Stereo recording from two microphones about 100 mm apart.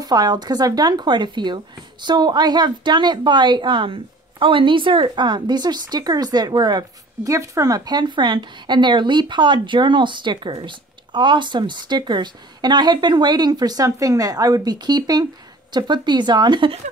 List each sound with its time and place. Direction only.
0.0 s a woman's voice: 40° right (ahead or behind)
7.2 s a woman's voice: 30° right (ahead or behind); by 16.7 s 50° right (ahead or behind)